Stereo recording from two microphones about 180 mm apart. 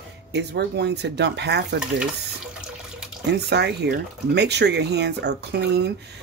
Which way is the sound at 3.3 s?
70° right (ahead or behind).